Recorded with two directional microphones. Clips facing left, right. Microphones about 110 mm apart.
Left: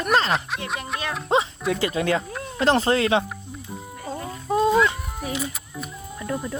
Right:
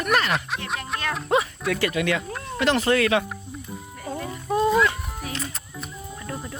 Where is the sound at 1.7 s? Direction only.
25° left (ahead or behind).